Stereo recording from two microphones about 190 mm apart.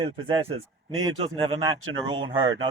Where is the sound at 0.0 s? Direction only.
25° right (ahead or behind).